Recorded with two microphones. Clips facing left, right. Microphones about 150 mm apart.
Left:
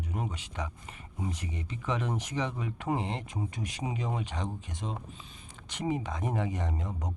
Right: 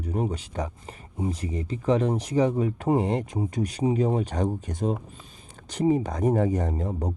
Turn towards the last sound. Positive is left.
turn(degrees=-35)  # may be behind; listen again after turning